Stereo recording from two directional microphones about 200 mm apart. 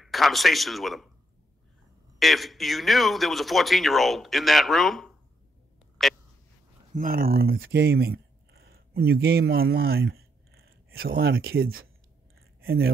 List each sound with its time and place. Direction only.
0.0 s speech: centre (ahead or behind)
2.1 s speech: centre (ahead or behind)
6.0 s a sound: centre (ahead or behind)
6.9 s speech: 45° right (ahead or behind)
10.5 s a sound: 50° right (ahead or behind)
12.6 s speech: 50° right (ahead or behind)